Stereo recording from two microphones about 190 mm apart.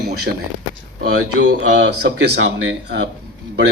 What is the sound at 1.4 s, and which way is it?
Speech, 70° right (ahead or behind).